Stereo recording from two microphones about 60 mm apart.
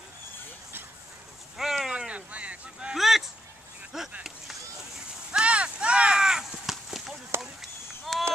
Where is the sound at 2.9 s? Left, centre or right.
Centre.